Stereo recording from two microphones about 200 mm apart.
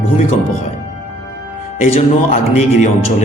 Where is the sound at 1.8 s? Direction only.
35° left (ahead or behind).